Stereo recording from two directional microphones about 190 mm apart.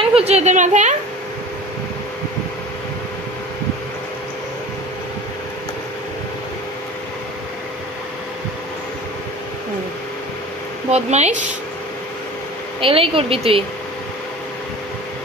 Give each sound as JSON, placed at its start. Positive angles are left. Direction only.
{"t": 0.0, "sound": "a sound", "side_deg": -30}
{"t": 10.9, "sound": "speech", "side_deg": -35}
{"t": 12.8, "sound": "speech", "side_deg": -30}